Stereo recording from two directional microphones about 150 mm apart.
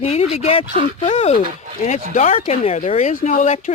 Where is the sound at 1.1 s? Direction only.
45° left (ahead or behind).